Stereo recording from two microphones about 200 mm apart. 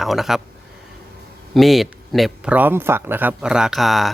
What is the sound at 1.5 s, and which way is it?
Speech, centre (ahead or behind).